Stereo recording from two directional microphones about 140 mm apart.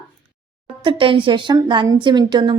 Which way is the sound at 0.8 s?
40° right (ahead or behind).